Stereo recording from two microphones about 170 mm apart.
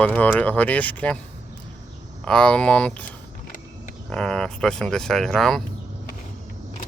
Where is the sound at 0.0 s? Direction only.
10° left (ahead or behind).